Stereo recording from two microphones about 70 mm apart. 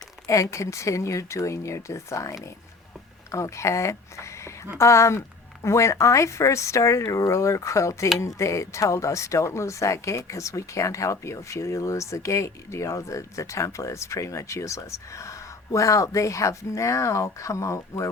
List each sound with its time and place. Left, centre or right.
0.5 s speech: left